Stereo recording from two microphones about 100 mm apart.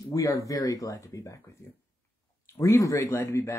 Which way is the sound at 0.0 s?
35° left (ahead or behind).